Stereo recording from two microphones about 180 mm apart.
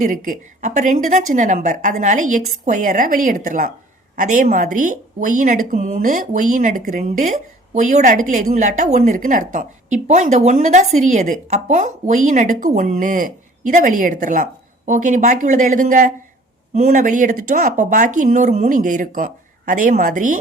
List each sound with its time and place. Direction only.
0.0 s a woman's voice: 45° right (ahead or behind)